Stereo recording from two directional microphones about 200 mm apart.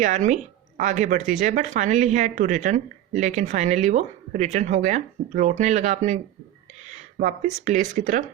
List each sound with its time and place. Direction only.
0.0 s speech: 40° right (ahead or behind)
6.8 s a sound: 35° right (ahead or behind)
7.6 s speech: 40° right (ahead or behind)